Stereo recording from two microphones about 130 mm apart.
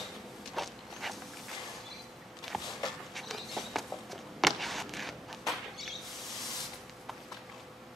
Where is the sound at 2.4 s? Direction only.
Centre (ahead or behind).